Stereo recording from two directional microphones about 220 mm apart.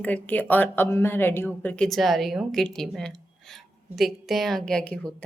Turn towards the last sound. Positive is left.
turn(degrees=5)  # may be behind; listen again after turning